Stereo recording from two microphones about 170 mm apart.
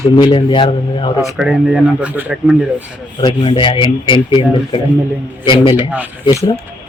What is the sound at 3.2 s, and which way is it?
Speech, 30° left (ahead or behind).